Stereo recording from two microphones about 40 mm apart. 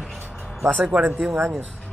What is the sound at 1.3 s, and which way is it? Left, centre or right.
Speech, right.